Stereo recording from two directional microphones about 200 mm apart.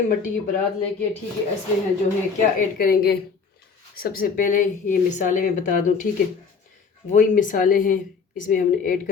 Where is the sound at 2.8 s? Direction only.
50° left (ahead or behind).